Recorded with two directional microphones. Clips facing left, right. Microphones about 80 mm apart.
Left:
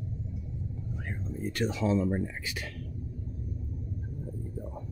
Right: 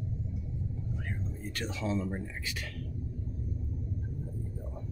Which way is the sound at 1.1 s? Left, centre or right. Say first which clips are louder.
Left 4 dB; centre.